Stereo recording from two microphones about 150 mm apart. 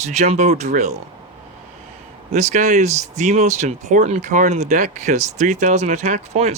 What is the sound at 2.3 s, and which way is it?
Speech, 55° right (ahead or behind).